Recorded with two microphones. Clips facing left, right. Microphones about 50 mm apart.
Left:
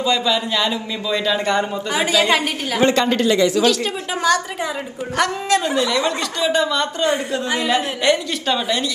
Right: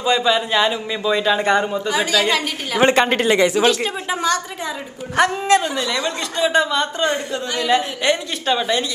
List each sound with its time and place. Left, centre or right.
0.0 s speech: right
1.9 s a woman's voice: centre
2.8 s a woman's voice: right
4.1 s a woman's voice: centre
5.1 s speech: right
7.7 s a woman's voice: centre